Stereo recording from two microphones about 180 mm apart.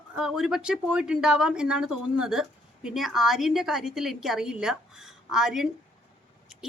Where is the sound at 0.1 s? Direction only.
5° right (ahead or behind).